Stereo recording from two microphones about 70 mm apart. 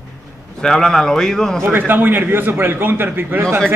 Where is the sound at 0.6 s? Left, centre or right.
Centre.